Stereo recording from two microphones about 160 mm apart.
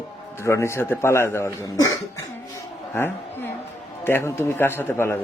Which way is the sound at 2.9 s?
15° left (ahead or behind).